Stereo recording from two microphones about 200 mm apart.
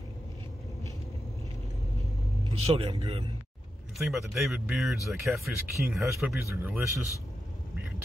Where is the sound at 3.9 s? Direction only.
Centre (ahead or behind).